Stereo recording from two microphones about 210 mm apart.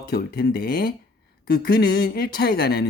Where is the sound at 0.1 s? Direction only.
50° left (ahead or behind).